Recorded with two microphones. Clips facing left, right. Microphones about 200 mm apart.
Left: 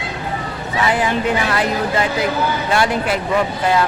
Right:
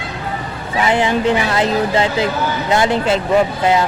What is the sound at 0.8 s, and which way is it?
Speech, 25° right (ahead or behind).